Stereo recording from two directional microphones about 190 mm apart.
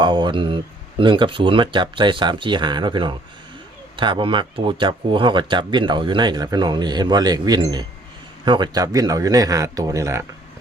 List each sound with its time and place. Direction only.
0.0 s speech: 25° right (ahead or behind)